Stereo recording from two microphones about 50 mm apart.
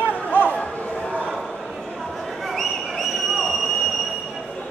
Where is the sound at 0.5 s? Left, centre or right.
Left.